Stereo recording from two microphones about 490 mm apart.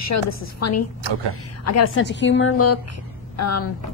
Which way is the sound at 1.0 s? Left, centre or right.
Right.